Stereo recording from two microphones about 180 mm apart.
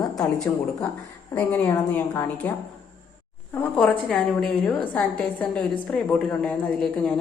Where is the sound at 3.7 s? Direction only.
5° left (ahead or behind).